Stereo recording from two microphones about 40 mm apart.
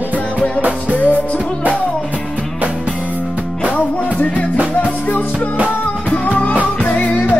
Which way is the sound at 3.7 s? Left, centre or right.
Left.